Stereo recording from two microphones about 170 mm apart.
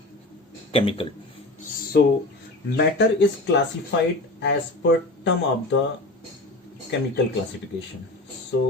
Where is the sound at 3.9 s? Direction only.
90° left.